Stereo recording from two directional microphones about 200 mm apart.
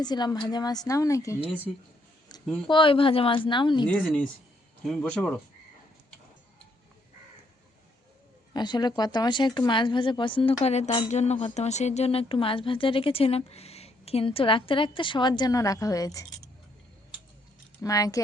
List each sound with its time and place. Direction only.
0.0 s speech: 20° left (ahead or behind)
2.3 s a sound: 20° left (ahead or behind)
2.6 s speech: 25° left (ahead or behind)
3.8 s speech: 5° left (ahead or behind)
8.5 s speech: 20° left (ahead or behind)
17.8 s speech: 15° left (ahead or behind)